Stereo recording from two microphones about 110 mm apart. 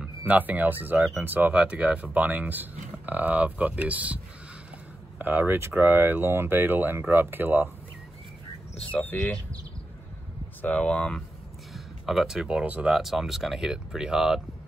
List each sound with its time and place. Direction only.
0.0 s speech: 10° right (ahead or behind)
5.2 s speech: 15° right (ahead or behind)
8.9 s speech: 15° left (ahead or behind)
10.6 s speech: 15° left (ahead or behind)
11.7 s speech: 5° right (ahead or behind)